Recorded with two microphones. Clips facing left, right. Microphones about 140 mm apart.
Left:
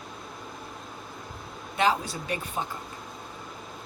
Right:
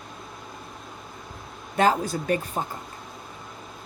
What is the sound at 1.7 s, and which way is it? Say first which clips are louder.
Speech: right 4 dB; 45° right (ahead or behind).